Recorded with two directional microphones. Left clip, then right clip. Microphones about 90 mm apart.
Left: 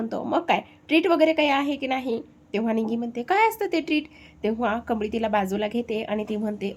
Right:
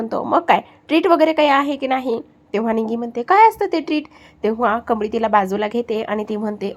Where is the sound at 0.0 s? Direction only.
35° right (ahead or behind).